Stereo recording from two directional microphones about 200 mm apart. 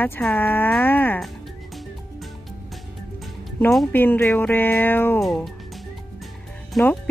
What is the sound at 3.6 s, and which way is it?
Speech, 5° left (ahead or behind).